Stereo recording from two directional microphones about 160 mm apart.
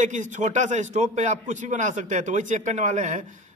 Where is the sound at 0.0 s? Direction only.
50° right (ahead or behind).